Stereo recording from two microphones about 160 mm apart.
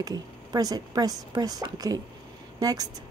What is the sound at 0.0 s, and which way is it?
Speech, 25° right (ahead or behind).